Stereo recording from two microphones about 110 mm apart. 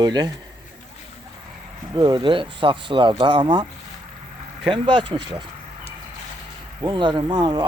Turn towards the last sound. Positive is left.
turn(degrees=-40)  # may be behind; listen again after turning